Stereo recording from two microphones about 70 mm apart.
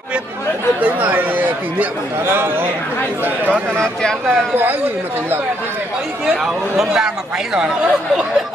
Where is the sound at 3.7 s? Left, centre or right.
Centre.